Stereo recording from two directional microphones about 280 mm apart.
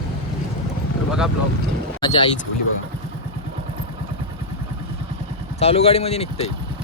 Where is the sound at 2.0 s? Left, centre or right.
Centre.